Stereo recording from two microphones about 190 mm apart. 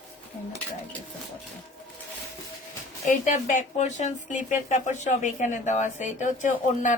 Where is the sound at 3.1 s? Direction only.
40° left (ahead or behind).